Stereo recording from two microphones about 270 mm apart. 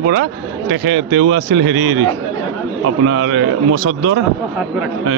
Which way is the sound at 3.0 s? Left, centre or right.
Right.